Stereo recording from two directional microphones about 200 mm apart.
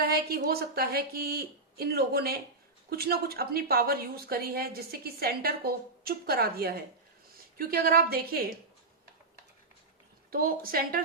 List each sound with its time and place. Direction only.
0.0 s a woman's voice: 50° right (ahead or behind)
10.3 s a woman's voice: 45° right (ahead or behind)